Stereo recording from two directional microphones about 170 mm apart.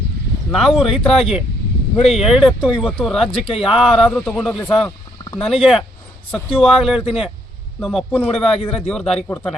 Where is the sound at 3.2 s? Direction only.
30° left (ahead or behind).